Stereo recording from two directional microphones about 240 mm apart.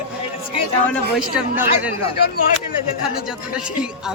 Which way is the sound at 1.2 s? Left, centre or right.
Centre.